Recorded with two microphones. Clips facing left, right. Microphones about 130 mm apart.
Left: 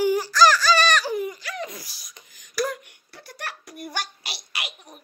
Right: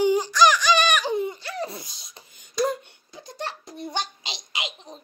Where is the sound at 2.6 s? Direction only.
20° right (ahead or behind).